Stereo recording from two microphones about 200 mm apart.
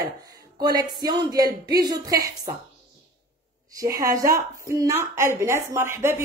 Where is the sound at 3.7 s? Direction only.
15° right (ahead or behind).